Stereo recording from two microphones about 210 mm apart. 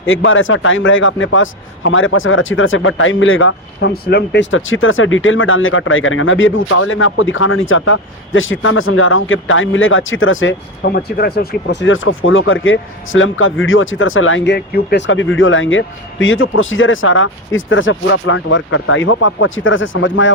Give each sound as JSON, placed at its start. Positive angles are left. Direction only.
{"t": 0.0, "sound": "a man's voice", "side_deg": 70}
{"t": 10.8, "sound": "a man's voice", "side_deg": 45}